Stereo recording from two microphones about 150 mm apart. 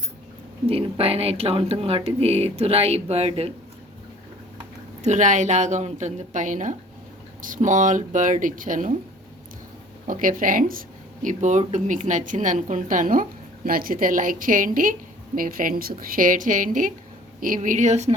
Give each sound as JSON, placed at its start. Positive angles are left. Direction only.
{"t": 0.7, "sound": "speech", "side_deg": -40}
{"t": 5.0, "sound": "speech", "side_deg": -55}
{"t": 10.1, "sound": "a woman's voice", "side_deg": -65}